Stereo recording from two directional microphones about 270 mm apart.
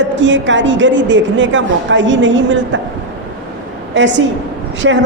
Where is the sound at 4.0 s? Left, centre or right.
Right.